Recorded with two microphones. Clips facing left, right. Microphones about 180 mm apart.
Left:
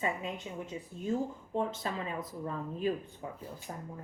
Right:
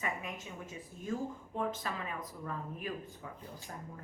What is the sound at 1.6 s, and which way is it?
A woman's voice, 30° left (ahead or behind).